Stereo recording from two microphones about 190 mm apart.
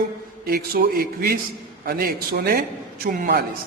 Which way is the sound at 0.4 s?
50° right (ahead or behind).